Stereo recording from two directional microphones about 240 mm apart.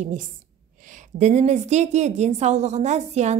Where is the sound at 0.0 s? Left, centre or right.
Right.